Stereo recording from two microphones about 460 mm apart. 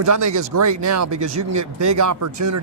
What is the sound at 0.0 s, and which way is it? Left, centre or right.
Speech, right.